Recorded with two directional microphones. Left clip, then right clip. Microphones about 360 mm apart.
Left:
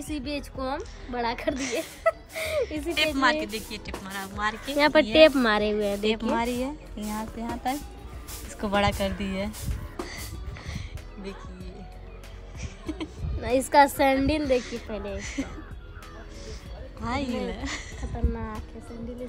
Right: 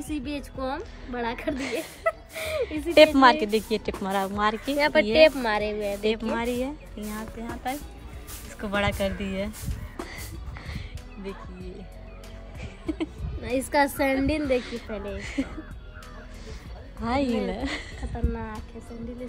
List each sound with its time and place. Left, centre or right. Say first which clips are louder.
0.6 s speech: even; centre
2.6 s speech: right 12 dB; centre
4.7 s a woman's voice: left 2 dB; left
6.0 s speech: even; centre
12.5 s a sound: right 4 dB; centre
13.4 s a woman's voice: left 4 dB; centre
14.4 s speech: left 1 dB; centre
17.0 s speech: right 4 dB; centre